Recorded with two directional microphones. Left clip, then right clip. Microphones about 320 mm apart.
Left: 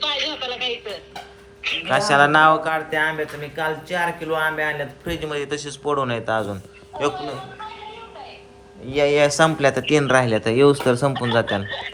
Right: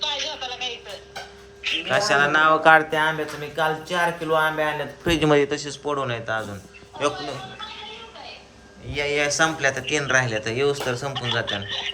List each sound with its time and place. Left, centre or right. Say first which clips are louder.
0.0 s a sound: left 3 dB; left
1.9 s a man's voice: left 4 dB; centre
2.9 s a sound: left 1 dB; centre
5.0 s a man's voice: right 9 dB; right
5.3 s a man's voice: right 6 dB; centre
8.9 s speech: left 6 dB; centre